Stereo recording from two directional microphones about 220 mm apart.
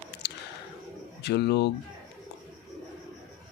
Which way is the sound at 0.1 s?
50° left (ahead or behind).